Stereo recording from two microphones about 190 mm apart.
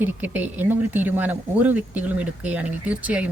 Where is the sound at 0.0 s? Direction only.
10° right (ahead or behind).